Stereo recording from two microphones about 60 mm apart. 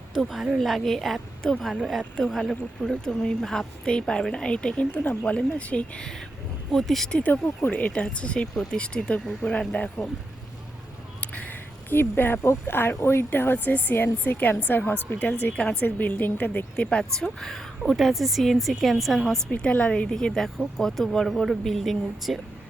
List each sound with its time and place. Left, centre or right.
0.1 s a woman's voice: centre; by 6.1 s left
6.7 s a woman's voice: centre
7.1 s speech: left
11.2 s speech: left
16.7 s a woman's voice: centre
19.5 s a woman's voice: centre